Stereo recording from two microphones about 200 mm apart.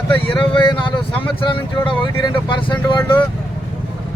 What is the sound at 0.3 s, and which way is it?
Speech, 25° left (ahead or behind).